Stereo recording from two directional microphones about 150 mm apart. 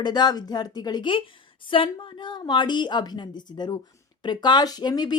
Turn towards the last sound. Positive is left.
turn(degrees=30)  # may be behind; listen again after turning